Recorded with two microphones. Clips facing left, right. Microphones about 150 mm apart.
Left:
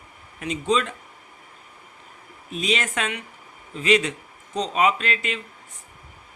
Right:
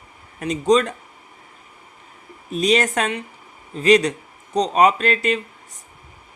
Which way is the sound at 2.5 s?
40° right (ahead or behind).